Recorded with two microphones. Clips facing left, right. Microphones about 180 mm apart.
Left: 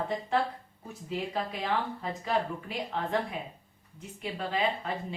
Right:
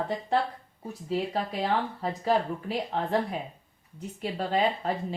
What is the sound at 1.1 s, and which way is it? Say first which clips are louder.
A woman's voice: right 4 dB; 35° right (ahead or behind).